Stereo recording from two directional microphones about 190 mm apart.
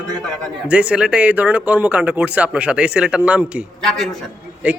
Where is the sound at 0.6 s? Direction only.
5° right (ahead or behind).